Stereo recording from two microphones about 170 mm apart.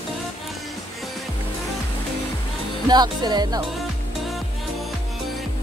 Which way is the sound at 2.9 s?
25° right (ahead or behind).